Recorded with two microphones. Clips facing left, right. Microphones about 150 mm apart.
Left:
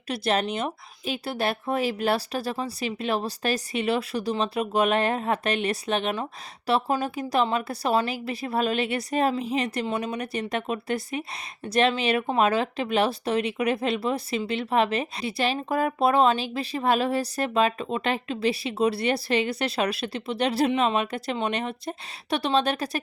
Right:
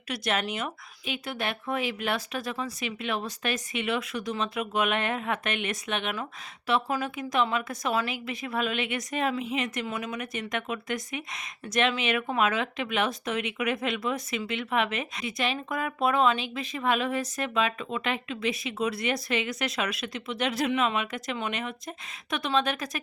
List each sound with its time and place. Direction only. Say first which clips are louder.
0.1 s speech: left 4 dB; 30° left (ahead or behind)